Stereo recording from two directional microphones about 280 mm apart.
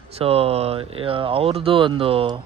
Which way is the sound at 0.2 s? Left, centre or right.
Right.